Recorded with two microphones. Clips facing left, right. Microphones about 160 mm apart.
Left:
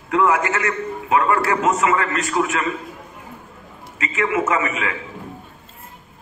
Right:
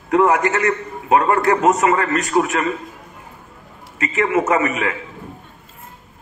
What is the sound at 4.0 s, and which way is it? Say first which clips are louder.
Speech: right 3 dB; 35° right (ahead or behind).